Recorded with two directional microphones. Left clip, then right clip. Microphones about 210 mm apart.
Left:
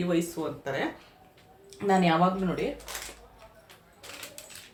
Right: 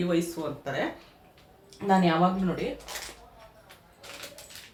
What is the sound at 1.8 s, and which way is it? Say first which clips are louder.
Speech: right 1 dB; 25° left (ahead or behind).